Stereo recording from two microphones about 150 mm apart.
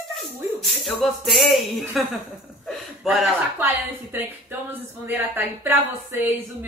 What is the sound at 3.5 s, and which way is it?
Speech, 10° right (ahead or behind).